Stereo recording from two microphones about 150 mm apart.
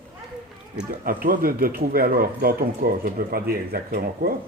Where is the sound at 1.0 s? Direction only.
75° right (ahead or behind).